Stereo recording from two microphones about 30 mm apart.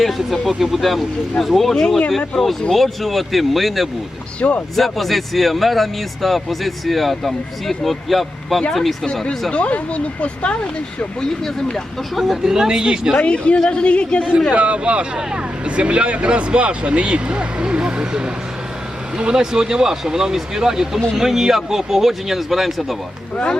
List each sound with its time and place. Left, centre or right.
0.3 s speech: centre
1.7 s speech: centre
2.7 s speech: centre
4.4 s speech: left
4.8 s speech: centre
9.5 s speech: left
12.5 s speech: centre
13.2 s a woman's voice: left
14.5 s speech: right; by 23.0 s centre